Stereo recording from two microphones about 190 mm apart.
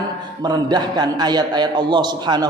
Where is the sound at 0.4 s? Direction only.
20° right (ahead or behind).